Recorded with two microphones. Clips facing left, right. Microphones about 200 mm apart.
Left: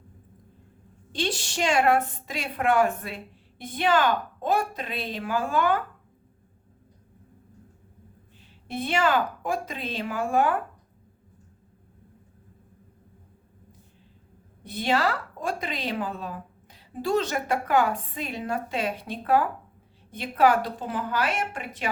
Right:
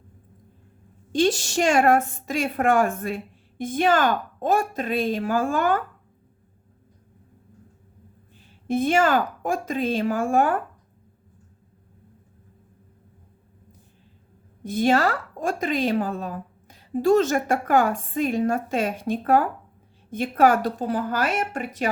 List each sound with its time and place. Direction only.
1.1 s speech: 45° right (ahead or behind)
8.6 s speech: 45° right (ahead or behind)
14.6 s speech: 45° right (ahead or behind)